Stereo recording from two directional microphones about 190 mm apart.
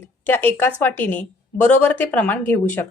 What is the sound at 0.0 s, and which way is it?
A woman's voice, 10° left (ahead or behind).